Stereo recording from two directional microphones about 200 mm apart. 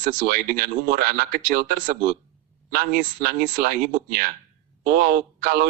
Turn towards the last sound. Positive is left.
turn(degrees=-45)  # may be behind; listen again after turning